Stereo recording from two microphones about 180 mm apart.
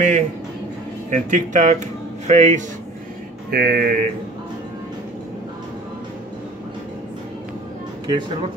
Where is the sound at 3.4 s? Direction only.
55° right (ahead or behind).